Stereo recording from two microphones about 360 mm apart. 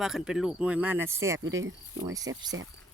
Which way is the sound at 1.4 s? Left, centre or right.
Right.